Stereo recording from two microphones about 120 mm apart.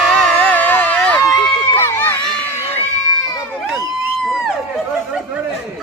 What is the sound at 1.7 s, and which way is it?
Run, 20° left (ahead or behind).